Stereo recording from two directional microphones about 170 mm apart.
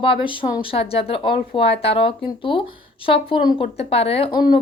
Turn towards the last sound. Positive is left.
turn(degrees=25)  # may be behind; listen again after turning